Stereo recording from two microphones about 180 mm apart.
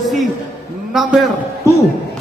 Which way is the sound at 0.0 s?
Centre (ahead or behind).